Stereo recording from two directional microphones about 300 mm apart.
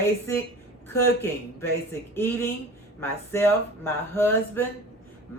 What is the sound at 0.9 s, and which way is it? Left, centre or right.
Speech, centre.